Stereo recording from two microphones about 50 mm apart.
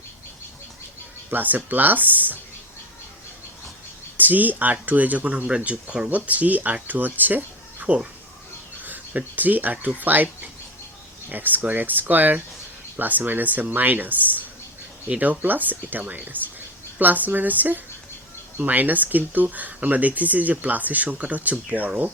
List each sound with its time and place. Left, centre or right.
1.3 s speech: right
4.2 s speech: right
5.5 s speech: right